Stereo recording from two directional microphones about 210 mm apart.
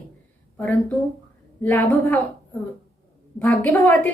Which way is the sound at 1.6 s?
10° left (ahead or behind).